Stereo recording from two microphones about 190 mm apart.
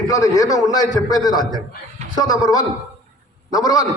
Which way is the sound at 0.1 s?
15° left (ahead or behind).